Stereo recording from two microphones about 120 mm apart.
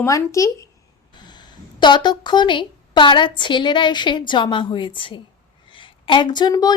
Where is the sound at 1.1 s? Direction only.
40° left (ahead or behind).